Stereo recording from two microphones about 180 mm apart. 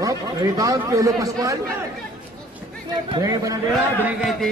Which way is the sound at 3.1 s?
20° right (ahead or behind).